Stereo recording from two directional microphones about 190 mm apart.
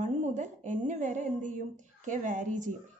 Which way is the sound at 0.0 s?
40° right (ahead or behind).